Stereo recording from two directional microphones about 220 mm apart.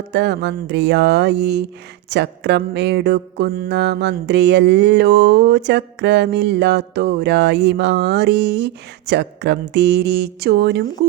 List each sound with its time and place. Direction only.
0.1 s mantra: 50° right (ahead or behind)